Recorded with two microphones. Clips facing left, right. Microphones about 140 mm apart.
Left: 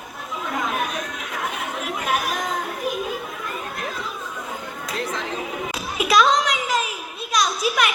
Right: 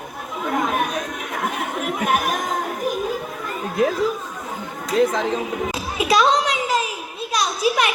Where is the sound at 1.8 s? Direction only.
50° right (ahead or behind).